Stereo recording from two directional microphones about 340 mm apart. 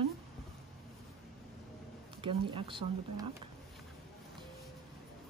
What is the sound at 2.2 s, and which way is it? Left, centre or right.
Speech, centre.